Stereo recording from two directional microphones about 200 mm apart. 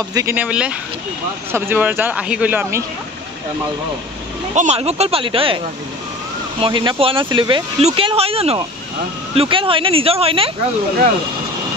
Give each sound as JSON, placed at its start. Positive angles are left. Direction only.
{"t": 0.1, "sound": "speech", "side_deg": -15}
{"t": 4.6, "sound": "speech", "side_deg": -35}
{"t": 6.6, "sound": "speech", "side_deg": -25}